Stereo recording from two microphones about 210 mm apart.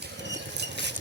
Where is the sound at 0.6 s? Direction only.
55° right (ahead or behind).